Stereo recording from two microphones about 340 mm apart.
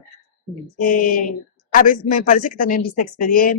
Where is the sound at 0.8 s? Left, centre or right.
Left.